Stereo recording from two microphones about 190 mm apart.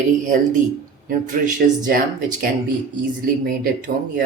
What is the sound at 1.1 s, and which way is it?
Speech, 45° right (ahead or behind).